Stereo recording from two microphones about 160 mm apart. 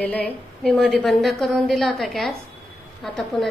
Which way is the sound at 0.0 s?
10° left (ahead or behind).